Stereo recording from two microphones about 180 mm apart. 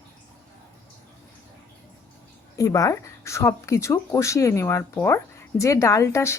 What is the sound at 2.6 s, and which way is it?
Speech, 20° left (ahead or behind).